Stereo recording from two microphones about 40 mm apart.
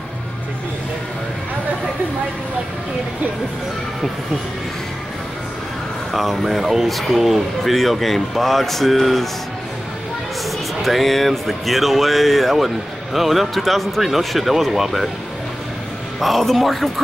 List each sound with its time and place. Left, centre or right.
6.1 s speech: centre
10.8 s speech: centre
16.2 s speech: centre